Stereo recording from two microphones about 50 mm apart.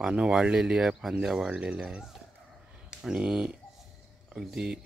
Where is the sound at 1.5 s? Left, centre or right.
Right.